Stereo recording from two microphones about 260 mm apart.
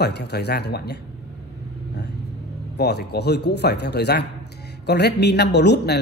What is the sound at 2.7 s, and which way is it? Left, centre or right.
Speech, left.